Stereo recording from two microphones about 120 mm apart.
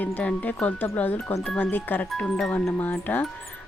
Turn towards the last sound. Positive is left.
turn(degrees=15)  # may be behind; listen again after turning